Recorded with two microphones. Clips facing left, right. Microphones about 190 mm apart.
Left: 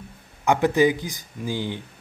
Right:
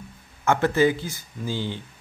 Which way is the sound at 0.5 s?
15° left (ahead or behind).